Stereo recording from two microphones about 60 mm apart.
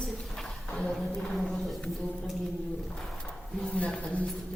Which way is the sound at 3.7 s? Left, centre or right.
Centre.